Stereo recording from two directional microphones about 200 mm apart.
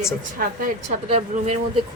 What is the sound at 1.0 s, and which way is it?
Speech, 35° right (ahead or behind).